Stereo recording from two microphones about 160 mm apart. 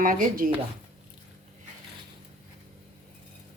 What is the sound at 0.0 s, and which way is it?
Speech, 60° right (ahead or behind).